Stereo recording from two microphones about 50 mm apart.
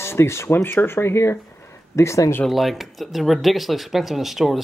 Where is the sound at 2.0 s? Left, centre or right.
Left.